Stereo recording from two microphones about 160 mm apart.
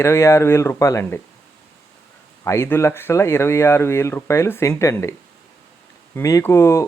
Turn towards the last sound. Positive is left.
turn(degrees=15)  # may be behind; listen again after turning